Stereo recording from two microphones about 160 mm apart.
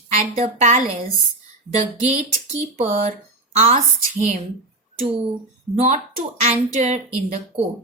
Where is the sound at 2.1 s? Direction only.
45° right (ahead or behind).